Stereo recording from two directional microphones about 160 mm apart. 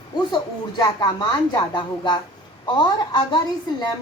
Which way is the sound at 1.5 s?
30° left (ahead or behind).